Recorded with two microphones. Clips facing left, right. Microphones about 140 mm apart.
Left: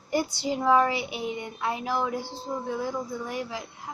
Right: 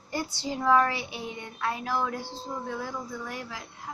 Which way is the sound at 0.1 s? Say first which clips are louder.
Left 5 dB; 15° left (ahead or behind).